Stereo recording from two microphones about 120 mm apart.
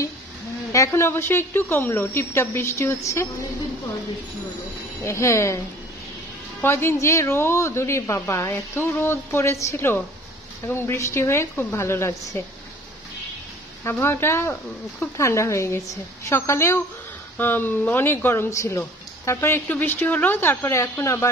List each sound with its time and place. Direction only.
0.7 s speech: 25° left (ahead or behind)
5.0 s speech: 25° left (ahead or behind)
6.6 s speech: 20° left (ahead or behind)
13.8 s speech: 20° left (ahead or behind)